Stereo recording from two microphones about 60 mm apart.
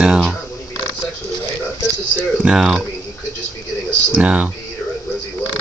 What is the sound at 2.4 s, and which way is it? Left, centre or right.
Speech, centre.